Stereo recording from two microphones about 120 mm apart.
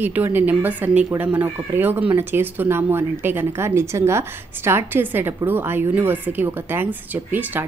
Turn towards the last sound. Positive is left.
turn(degrees=-15)  # may be behind; listen again after turning